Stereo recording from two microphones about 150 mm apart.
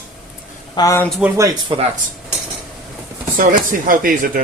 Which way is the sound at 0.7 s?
20° left (ahead or behind).